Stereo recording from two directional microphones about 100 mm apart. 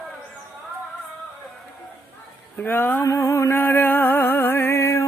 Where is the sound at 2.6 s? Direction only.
20° left (ahead or behind).